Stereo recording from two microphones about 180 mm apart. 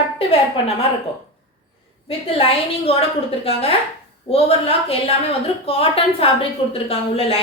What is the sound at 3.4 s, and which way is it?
Speech, 30° left (ahead or behind).